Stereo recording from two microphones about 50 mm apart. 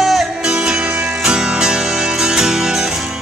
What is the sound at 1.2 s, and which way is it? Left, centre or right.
Music, centre.